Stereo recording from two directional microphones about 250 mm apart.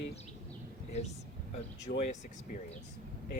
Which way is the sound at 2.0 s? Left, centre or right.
Left.